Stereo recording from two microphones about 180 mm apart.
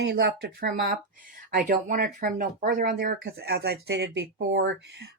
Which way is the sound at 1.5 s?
50° right (ahead or behind).